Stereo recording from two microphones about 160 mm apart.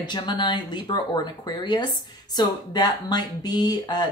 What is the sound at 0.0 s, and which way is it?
Speech, 30° left (ahead or behind).